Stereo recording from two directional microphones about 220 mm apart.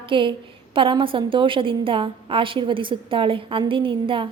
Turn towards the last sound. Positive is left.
turn(degrees=-25)  # may be behind; listen again after turning